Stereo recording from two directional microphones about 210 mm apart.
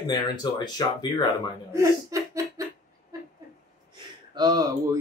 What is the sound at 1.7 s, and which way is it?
Laughter, 15° right (ahead or behind).